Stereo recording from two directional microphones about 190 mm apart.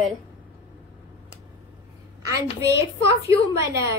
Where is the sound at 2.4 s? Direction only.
15° right (ahead or behind).